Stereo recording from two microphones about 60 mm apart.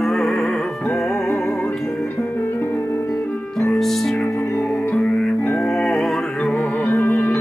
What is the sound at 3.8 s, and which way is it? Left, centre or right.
Music, centre.